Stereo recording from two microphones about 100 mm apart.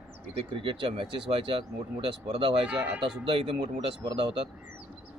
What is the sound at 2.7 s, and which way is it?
Speech, 10° right (ahead or behind).